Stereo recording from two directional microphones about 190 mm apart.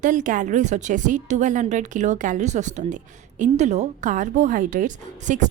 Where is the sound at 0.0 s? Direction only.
40° right (ahead or behind).